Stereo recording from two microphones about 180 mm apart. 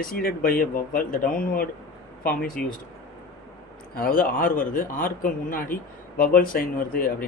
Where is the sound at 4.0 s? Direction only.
50° left (ahead or behind).